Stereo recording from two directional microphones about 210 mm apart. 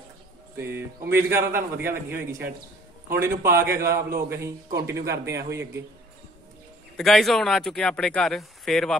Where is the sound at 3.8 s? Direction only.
45° right (ahead or behind).